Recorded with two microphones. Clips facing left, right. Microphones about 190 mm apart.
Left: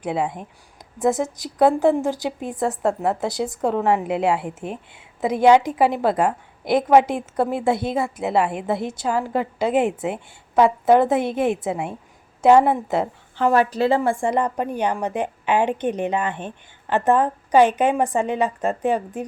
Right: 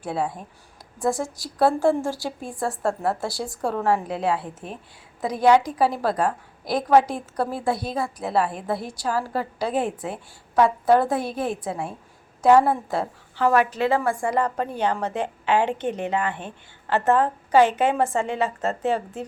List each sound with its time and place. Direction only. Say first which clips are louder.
0.0 s a woman's voice: left 3 dB; 20° left (ahead or behind)